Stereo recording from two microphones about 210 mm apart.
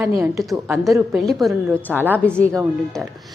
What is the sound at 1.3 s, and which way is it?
A woman's voice, centre (ahead or behind).